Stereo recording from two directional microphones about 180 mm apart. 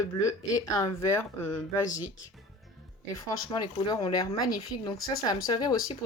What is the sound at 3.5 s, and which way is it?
Speech, 25° left (ahead or behind).